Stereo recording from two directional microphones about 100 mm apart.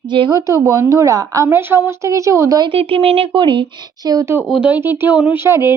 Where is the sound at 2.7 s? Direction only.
75° right (ahead or behind).